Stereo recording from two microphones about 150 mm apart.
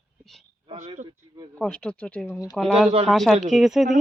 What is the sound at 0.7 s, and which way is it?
Speech, 45° right (ahead or behind).